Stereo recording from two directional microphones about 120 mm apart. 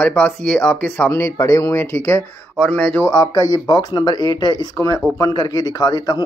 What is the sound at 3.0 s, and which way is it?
A man's voice, 30° left (ahead or behind).